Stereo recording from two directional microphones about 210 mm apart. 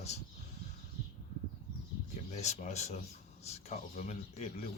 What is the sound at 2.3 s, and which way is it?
Speech, 35° left (ahead or behind).